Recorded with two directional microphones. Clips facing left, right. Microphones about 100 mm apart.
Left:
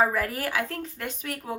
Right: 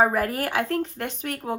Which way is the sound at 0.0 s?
50° right (ahead or behind).